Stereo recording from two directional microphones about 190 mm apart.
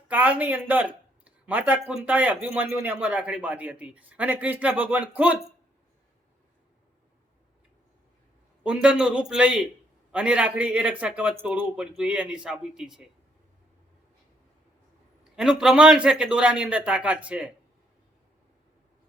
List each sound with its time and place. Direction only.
0.1 s speech: 10° right (ahead or behind)
0.7 s a sound: 10° right (ahead or behind)
1.9 s speech: 5° right (ahead or behind)
8.6 s a man's voice: 5° right (ahead or behind)
15.2 s a man's voice: 5° right (ahead or behind)